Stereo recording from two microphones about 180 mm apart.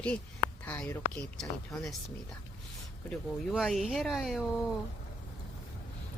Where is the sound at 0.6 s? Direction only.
10° left (ahead or behind).